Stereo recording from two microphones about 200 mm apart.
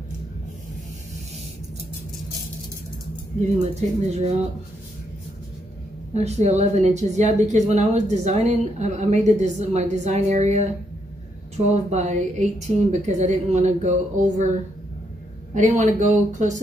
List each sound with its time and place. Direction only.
4.1 s speech: 35° right (ahead or behind)
6.1 s speech: 35° right (ahead or behind)
15.5 s speech: 40° right (ahead or behind)